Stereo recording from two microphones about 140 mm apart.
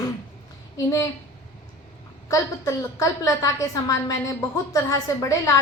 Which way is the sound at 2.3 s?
20° left (ahead or behind).